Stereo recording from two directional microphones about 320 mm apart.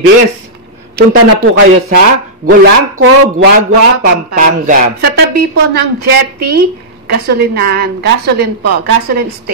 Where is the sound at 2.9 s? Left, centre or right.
Right.